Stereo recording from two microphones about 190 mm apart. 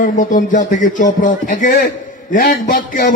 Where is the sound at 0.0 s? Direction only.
45° left (ahead or behind).